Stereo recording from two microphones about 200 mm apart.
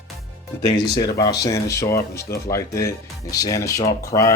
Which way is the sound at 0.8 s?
20° left (ahead or behind).